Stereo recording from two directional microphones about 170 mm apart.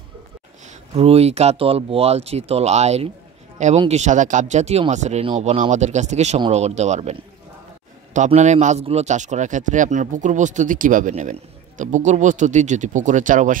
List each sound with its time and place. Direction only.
0.9 s a man's voice: 35° right (ahead or behind)